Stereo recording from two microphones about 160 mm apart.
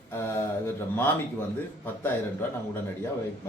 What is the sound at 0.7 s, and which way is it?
A man's voice, 15° left (ahead or behind).